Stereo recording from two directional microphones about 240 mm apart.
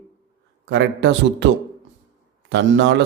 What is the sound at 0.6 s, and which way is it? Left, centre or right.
Speech, right.